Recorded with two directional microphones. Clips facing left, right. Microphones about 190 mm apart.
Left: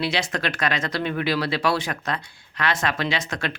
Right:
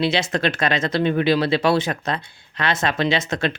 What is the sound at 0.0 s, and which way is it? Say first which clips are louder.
Speech: right 5 dB; 25° right (ahead or behind).